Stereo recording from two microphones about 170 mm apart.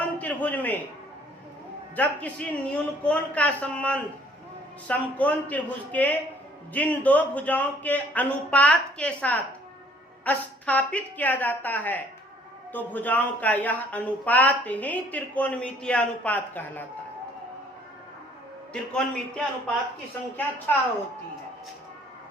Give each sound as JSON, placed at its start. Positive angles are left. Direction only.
{"t": 0.0, "sound": "a sound", "side_deg": 10}
{"t": 2.0, "sound": "speech", "side_deg": 10}
{"t": 18.7, "sound": "a man's voice", "side_deg": 5}
{"t": 20.7, "sound": "speech", "side_deg": 10}